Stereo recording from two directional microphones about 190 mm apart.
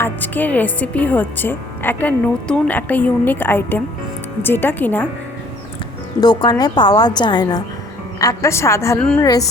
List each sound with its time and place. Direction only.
0.0 s speech: 10° left (ahead or behind)
6.1 s a woman's voice: 20° left (ahead or behind)
9.2 s a woman's voice: 20° left (ahead or behind)